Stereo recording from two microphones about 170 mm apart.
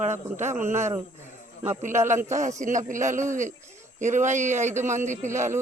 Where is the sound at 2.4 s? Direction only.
45° right (ahead or behind).